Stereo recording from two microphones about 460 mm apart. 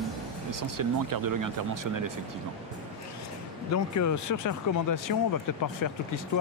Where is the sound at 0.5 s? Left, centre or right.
Right.